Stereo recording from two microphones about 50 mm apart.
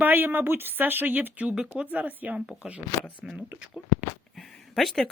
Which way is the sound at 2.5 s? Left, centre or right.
Right.